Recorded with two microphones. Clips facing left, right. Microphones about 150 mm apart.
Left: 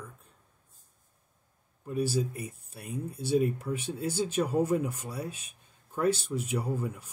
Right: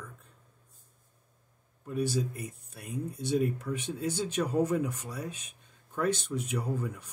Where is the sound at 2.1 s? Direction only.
30° left (ahead or behind).